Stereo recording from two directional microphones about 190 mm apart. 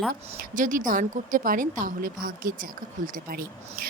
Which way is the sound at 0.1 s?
45° right (ahead or behind).